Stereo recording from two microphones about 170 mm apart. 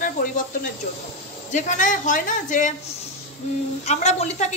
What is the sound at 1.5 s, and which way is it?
A woman's voice, 45° left (ahead or behind).